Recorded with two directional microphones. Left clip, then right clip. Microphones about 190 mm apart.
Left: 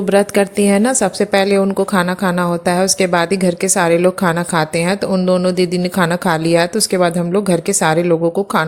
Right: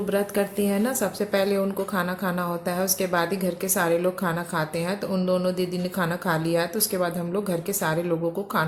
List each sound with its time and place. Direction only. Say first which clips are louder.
0.1 s a woman's voice: left 13 dB; 40° left (ahead or behind)